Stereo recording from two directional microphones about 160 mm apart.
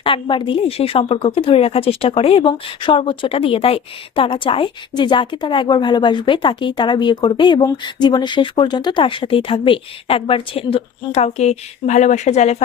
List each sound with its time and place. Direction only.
0.0 s a woman's voice: 30° left (ahead or behind)